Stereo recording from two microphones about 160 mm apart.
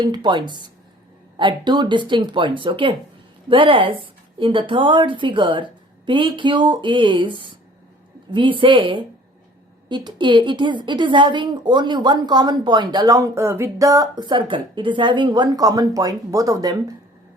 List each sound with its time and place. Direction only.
0.0 s a woman's voice: 25° right (ahead or behind)